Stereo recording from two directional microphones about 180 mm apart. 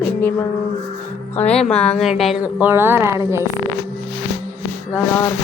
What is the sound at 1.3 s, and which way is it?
A woman's voice, 5° left (ahead or behind).